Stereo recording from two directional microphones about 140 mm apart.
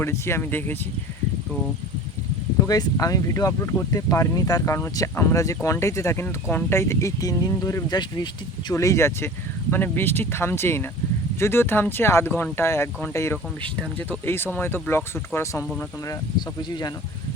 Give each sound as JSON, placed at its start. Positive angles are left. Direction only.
{"t": 0.0, "sound": "speech", "side_deg": 20}
{"t": 2.6, "sound": "speech", "side_deg": 25}
{"t": 16.6, "sound": "speech", "side_deg": 30}